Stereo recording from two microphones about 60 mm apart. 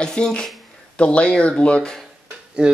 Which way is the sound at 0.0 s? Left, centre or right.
Centre.